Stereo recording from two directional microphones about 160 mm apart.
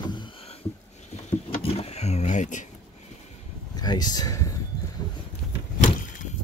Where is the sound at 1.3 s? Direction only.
40° left (ahead or behind).